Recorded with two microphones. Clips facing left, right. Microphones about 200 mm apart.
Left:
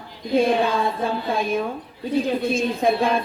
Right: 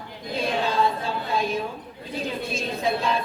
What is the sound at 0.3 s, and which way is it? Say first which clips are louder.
A woman's voice: left 6 dB; 55° left (ahead or behind).